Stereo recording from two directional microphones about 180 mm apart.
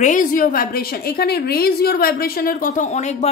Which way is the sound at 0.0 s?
45° left (ahead or behind).